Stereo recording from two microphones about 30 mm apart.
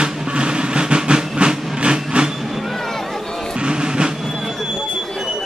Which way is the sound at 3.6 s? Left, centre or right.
Right.